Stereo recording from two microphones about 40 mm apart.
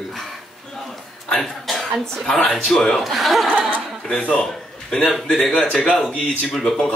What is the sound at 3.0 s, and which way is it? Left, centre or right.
Speech, centre.